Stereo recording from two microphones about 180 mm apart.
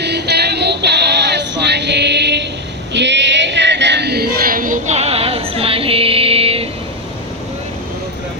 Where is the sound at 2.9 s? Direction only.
75° right (ahead or behind); by 6.7 s 30° right (ahead or behind).